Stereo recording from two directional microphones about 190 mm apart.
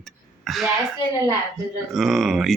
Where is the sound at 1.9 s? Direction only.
Centre (ahead or behind).